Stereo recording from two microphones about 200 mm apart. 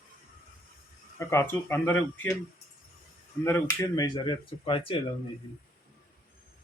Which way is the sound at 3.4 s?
15° left (ahead or behind).